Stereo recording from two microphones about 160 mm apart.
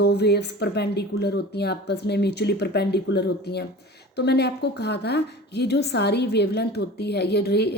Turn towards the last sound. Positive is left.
turn(degrees=90)